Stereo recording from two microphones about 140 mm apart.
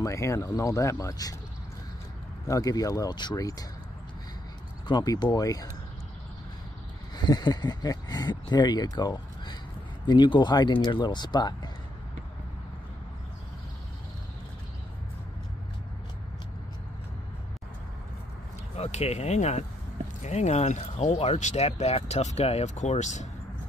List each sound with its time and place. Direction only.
0.0 s speech: 20° left (ahead or behind)
2.4 s speech: 25° left (ahead or behind)
4.8 s speech: 30° left (ahead or behind)
7.2 s speech: 30° left (ahead or behind)
18.8 s speech: 50° left (ahead or behind)